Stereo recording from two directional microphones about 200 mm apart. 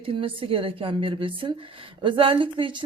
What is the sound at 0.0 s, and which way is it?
A woman's voice, 25° right (ahead or behind).